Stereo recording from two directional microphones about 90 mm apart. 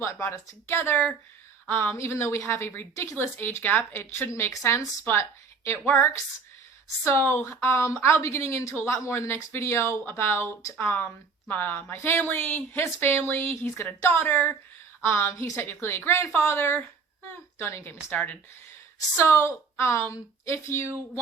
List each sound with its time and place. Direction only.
0.0 s speech: 30° left (ahead or behind)
19.1 s a woman's voice: 30° left (ahead or behind)